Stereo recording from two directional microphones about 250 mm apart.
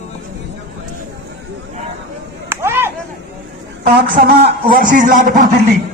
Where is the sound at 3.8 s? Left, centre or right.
Right.